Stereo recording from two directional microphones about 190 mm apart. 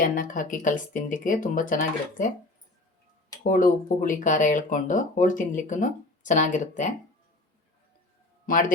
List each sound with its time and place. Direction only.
0.0 s speech: 45° left (ahead or behind)
3.4 s speech: 45° left (ahead or behind)
8.4 s speech: 45° left (ahead or behind)